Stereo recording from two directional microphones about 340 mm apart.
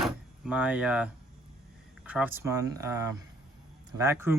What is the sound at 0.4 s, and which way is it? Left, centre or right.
Speech, centre.